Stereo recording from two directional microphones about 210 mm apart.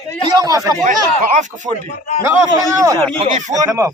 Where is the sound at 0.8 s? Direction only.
35° right (ahead or behind).